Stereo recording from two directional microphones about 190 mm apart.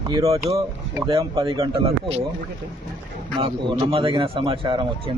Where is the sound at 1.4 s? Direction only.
30° right (ahead or behind).